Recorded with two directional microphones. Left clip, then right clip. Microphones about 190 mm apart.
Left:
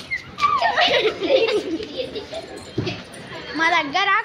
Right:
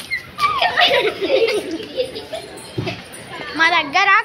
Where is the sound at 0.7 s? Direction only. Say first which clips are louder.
Right 3 dB; 50° left (ahead or behind).